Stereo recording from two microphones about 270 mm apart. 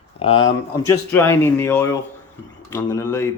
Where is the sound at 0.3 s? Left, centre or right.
Left.